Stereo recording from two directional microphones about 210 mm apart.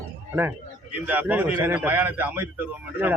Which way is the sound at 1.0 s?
10° right (ahead or behind).